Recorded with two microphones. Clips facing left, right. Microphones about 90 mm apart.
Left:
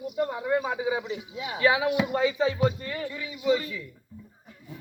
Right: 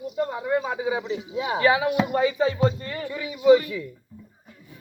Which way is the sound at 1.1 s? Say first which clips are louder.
Right 7 dB; 30° right (ahead or behind).